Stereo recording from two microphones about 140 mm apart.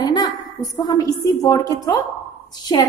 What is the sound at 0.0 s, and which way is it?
A woman's voice, 30° left (ahead or behind).